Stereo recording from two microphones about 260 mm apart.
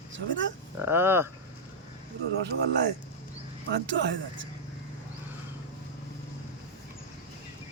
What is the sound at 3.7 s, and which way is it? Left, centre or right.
Speech, right.